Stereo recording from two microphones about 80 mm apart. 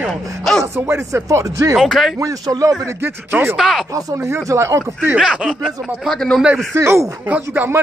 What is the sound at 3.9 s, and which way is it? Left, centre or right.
Speech, right.